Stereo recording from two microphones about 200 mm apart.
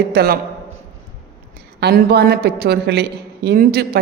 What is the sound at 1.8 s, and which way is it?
Speech, 50° right (ahead or behind).